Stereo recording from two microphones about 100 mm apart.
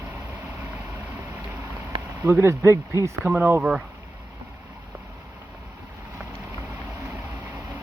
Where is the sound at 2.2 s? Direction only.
25° right (ahead or behind); by 3.8 s 10° right (ahead or behind).